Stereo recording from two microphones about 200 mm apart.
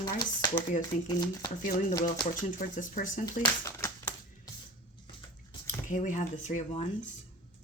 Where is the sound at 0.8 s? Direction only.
20° left (ahead or behind).